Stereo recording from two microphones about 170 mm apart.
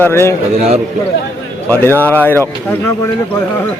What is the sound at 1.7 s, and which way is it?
Speech, 10° left (ahead or behind).